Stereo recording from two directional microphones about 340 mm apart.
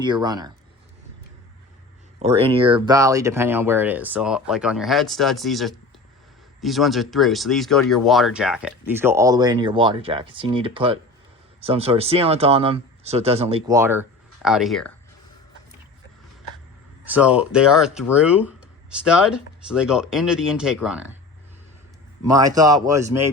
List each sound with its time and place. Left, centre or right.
0.0 s speech: centre
2.1 s speech: centre
17.1 s speech: centre
22.2 s speech: centre